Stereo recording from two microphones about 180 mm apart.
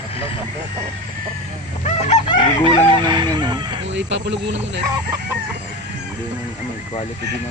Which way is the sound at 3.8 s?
85° right.